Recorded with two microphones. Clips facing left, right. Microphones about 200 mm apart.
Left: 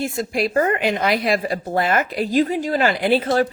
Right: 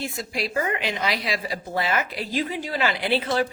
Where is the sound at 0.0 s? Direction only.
50° left (ahead or behind).